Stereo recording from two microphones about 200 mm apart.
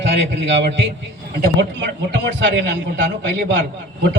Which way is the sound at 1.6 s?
60° right (ahead or behind).